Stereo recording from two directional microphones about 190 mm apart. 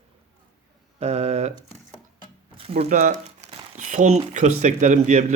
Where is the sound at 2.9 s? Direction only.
40° right (ahead or behind).